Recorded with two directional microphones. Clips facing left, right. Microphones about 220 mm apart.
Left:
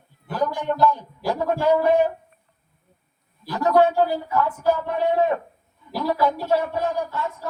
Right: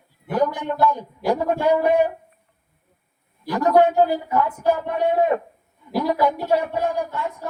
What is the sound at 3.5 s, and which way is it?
A man's voice, 15° right (ahead or behind).